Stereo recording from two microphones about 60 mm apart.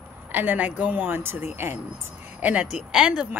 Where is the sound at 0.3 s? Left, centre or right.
Right.